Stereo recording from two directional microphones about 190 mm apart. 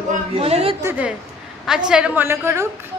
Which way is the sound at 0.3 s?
30° right (ahead or behind).